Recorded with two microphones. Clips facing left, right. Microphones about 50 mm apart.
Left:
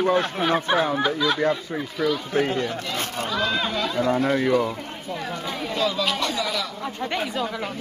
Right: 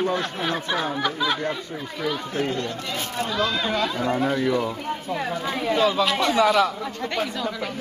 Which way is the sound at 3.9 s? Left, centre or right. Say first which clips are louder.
Left 2 dB; centre.